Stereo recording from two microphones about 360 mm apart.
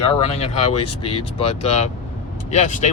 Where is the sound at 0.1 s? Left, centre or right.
Centre.